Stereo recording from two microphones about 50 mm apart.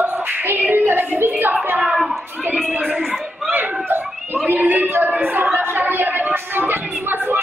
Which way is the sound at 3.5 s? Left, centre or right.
Right.